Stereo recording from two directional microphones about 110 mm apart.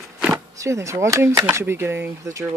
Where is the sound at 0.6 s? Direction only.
25° right (ahead or behind).